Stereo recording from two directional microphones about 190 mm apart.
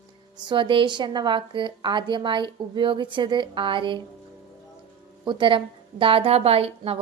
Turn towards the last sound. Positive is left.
turn(degrees=-30)  # may be behind; listen again after turning